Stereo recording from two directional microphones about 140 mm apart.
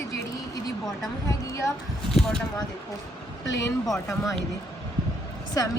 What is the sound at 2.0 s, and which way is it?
Speech, 5° left (ahead or behind).